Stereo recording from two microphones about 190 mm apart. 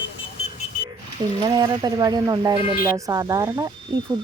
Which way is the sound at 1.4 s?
20° right (ahead or behind).